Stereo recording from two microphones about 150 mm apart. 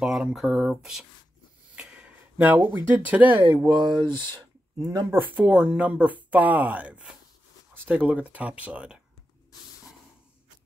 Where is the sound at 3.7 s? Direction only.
30° right (ahead or behind).